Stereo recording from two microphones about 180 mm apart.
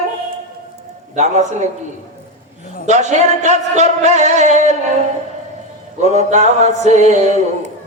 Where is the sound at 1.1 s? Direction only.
40° right (ahead or behind).